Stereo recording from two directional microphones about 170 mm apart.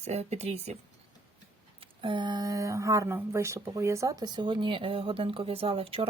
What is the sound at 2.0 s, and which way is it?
Speech, 25° right (ahead or behind).